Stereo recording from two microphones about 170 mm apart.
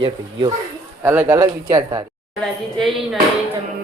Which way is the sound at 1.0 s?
10° right (ahead or behind).